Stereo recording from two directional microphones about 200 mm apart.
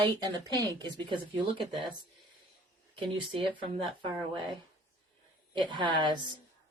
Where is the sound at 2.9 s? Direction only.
25° right (ahead or behind).